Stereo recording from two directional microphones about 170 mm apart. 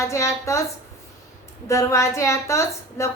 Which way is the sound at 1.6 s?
20° left (ahead or behind).